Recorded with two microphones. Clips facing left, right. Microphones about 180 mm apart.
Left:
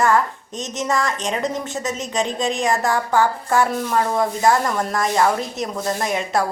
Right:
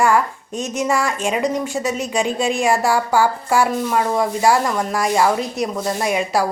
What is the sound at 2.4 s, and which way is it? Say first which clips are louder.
Speech: right 3 dB; 20° left (ahead or behind).